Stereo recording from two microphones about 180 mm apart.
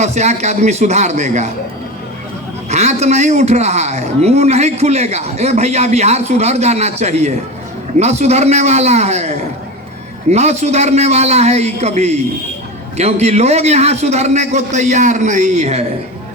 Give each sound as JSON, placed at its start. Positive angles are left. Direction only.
{"t": 0.0, "sound": "a man's voice", "side_deg": -40}
{"t": 2.6, "sound": "a man's voice", "side_deg": -40}